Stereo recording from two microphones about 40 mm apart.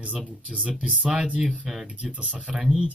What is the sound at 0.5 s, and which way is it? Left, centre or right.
Speech, right.